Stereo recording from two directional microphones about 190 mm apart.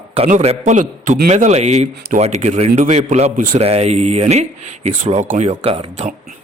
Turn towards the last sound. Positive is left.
turn(degrees=-35)  # may be behind; listen again after turning